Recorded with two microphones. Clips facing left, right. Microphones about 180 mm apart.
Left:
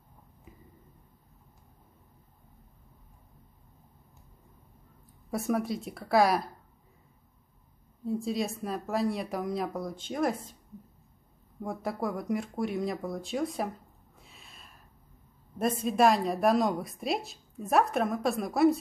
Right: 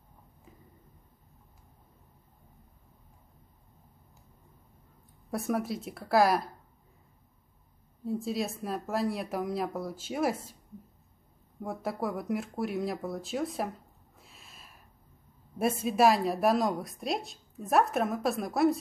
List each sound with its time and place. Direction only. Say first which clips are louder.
5.3 s speech: left 1 dB; centre (ahead or behind)
8.0 s speech: left 1 dB; centre (ahead or behind)
11.6 s speech: left 1 dB; centre (ahead or behind)
14.2 s a sound: even; centre (ahead or behind)
15.5 s speech: even; 5° right (ahead or behind)